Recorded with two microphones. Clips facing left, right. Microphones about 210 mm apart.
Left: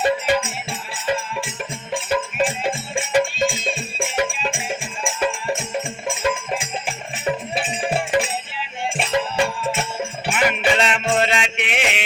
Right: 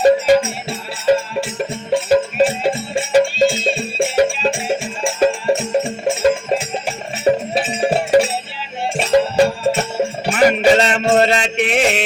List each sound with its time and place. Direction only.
0.0 s music: 40° right (ahead or behind)